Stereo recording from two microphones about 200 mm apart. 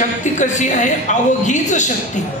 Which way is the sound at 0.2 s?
35° left (ahead or behind).